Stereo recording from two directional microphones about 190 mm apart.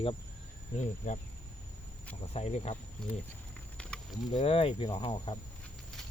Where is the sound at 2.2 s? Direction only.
35° left (ahead or behind).